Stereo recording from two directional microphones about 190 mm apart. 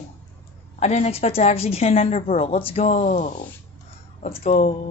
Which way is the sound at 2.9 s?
45° left (ahead or behind).